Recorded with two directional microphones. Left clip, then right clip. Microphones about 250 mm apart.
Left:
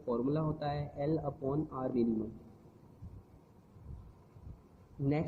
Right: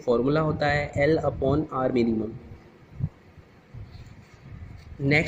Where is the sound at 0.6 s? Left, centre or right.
Right.